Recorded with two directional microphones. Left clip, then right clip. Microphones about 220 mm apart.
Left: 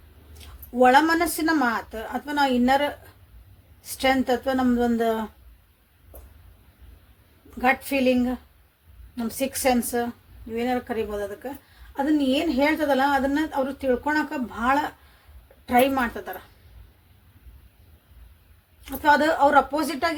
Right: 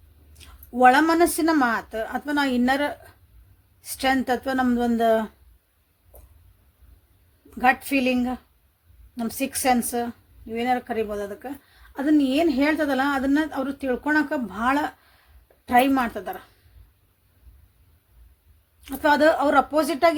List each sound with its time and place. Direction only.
0.8 s a woman's voice: 50° right (ahead or behind)
7.6 s a woman's voice: 50° right (ahead or behind)
18.9 s a woman's voice: 50° right (ahead or behind)